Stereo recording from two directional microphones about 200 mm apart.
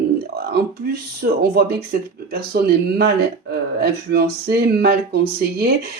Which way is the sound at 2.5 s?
50° right (ahead or behind).